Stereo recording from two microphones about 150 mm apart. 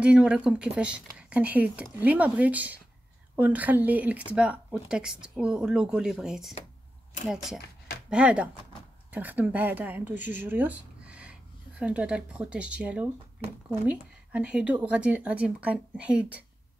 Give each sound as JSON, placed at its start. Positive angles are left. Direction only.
{"t": 0.0, "sound": "speech", "side_deg": -5}